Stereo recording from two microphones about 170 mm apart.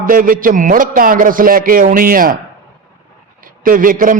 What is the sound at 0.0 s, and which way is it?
A man's voice, 55° right (ahead or behind).